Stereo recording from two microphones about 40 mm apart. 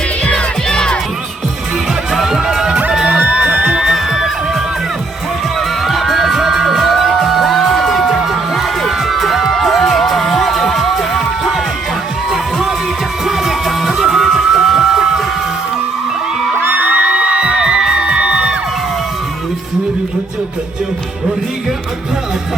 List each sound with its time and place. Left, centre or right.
0.3 s music: centre
2.1 s music: centre
3.1 s music: right
3.8 s music: centre
5.5 s music: centre
16.6 s music: right
17.1 s music: right